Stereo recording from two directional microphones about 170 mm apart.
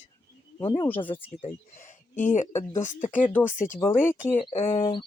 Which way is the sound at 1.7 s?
45° left (ahead or behind).